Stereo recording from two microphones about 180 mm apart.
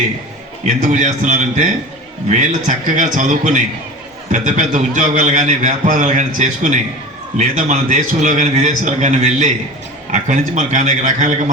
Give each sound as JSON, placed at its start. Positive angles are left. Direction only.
{"t": 0.7, "sound": "a man's voice", "side_deg": -45}